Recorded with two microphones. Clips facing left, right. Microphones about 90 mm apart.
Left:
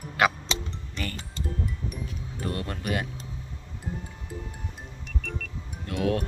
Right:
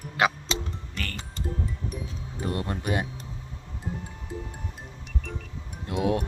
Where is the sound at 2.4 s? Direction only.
20° right (ahead or behind).